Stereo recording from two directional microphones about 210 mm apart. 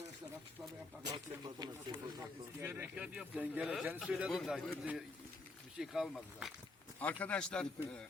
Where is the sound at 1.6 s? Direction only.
20° right (ahead or behind).